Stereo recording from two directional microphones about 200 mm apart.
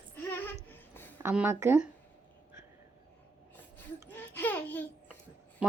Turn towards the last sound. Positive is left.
turn(degrees=-5)  # may be behind; listen again after turning